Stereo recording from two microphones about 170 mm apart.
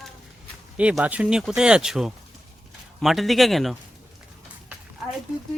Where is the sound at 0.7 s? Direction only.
5° right (ahead or behind).